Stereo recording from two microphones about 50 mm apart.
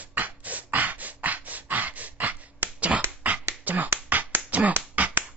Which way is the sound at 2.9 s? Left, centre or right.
Right.